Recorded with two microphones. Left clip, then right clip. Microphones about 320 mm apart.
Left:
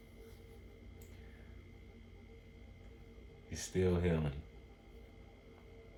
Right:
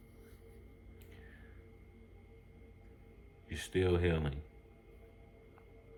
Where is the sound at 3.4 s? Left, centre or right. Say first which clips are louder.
Right 2 dB; right.